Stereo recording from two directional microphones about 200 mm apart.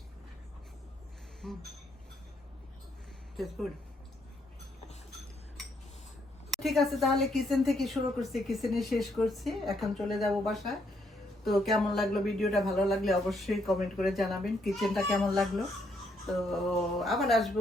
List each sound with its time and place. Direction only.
1.4 s a woman's voice: centre (ahead or behind)
3.3 s a woman's voice: centre (ahead or behind)
6.5 s a woman's voice: centre (ahead or behind)
16.5 s a woman's voice: centre (ahead or behind)